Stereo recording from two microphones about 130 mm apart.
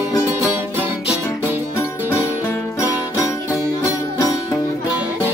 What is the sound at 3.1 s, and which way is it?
Music, 25° left (ahead or behind).